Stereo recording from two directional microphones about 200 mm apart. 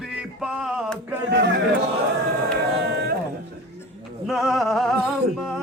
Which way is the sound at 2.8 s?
50° right (ahead or behind).